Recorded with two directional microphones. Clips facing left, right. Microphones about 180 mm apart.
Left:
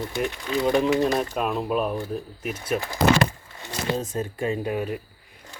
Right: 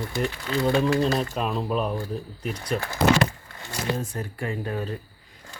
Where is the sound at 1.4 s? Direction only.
5° left (ahead or behind).